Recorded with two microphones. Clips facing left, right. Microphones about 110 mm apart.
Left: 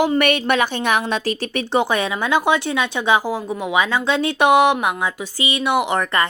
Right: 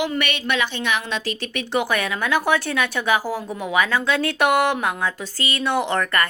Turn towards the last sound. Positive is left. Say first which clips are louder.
# left 2 dB
turn(degrees=15)  # may be behind; listen again after turning